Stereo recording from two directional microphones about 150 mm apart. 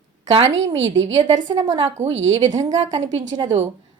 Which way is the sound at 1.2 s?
30° right (ahead or behind).